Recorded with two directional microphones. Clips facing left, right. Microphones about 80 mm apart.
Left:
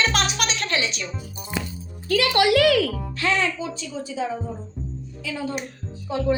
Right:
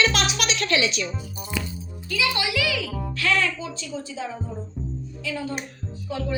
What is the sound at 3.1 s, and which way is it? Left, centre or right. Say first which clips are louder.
Speech: even; left.